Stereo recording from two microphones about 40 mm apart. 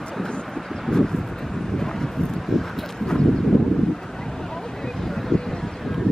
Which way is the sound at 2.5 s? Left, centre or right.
Centre.